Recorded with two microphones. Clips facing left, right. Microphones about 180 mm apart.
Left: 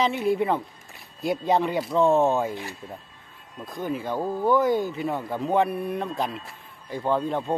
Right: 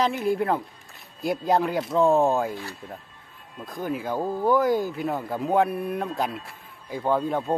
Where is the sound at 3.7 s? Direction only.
Centre (ahead or behind).